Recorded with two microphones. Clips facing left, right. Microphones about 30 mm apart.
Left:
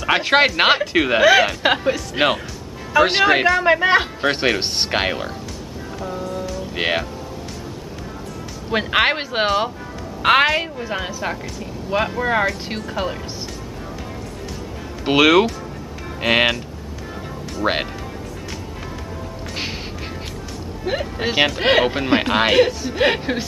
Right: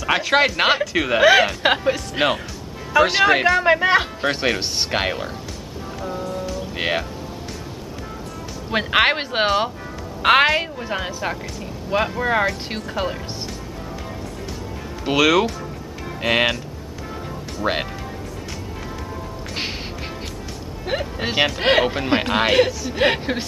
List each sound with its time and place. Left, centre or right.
0.0 s speech: centre
1.2 s a woman's voice: centre
2.1 s speech: centre
3.4 s a woman's voice: centre
4.3 s speech: centre
5.9 s music: centre
6.3 s speech: centre
6.7 s speech: centre
8.6 s a woman's voice: centre
15.0 s speech: centre
17.6 s speech: left
20.8 s a woman's voice: centre